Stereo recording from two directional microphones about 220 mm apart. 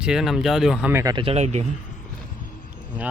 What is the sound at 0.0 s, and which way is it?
Speech, 5° right (ahead or behind).